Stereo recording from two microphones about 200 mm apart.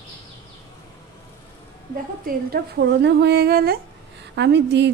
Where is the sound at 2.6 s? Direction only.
55° right (ahead or behind).